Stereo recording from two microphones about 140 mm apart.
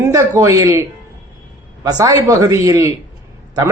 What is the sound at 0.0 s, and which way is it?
Speech, 20° right (ahead or behind).